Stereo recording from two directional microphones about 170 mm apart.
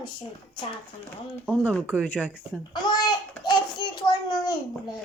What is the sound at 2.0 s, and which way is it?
Speech, 10° left (ahead or behind).